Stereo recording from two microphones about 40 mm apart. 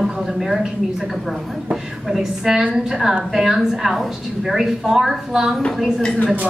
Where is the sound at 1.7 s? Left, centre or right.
Centre.